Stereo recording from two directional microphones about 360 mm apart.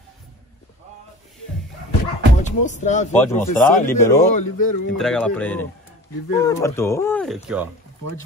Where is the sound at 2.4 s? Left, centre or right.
Centre.